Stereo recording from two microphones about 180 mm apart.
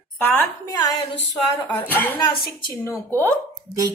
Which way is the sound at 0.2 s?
10° left (ahead or behind).